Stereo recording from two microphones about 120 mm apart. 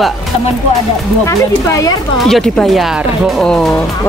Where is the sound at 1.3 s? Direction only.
25° left (ahead or behind).